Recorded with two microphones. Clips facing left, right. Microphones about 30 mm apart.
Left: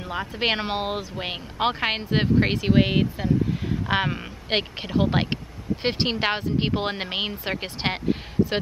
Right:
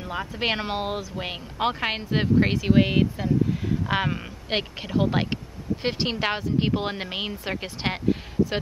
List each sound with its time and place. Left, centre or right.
0.0 s speech: centre